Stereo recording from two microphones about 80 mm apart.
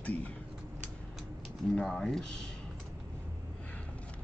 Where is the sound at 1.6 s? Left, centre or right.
Centre.